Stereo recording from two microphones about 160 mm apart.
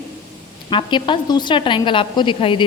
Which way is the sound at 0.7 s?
30° left (ahead or behind).